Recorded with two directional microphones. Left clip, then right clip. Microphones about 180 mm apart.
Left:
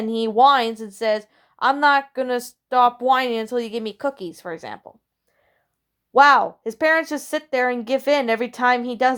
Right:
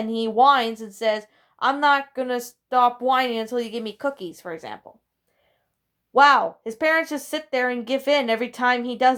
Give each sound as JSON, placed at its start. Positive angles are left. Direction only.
{"t": 0.0, "sound": "a woman's voice", "side_deg": 40}
{"t": 6.1, "sound": "a woman's voice", "side_deg": 40}